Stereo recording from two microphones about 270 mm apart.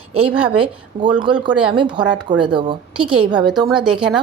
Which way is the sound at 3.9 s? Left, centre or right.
Centre.